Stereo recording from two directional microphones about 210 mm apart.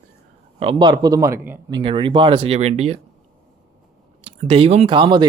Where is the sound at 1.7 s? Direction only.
25° right (ahead or behind).